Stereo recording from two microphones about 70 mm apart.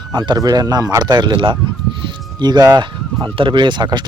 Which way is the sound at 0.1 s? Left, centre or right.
Right.